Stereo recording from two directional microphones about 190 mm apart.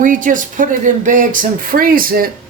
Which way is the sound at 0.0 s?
45° right (ahead or behind).